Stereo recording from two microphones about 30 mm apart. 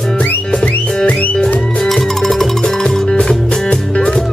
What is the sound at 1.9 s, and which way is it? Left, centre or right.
Music, centre.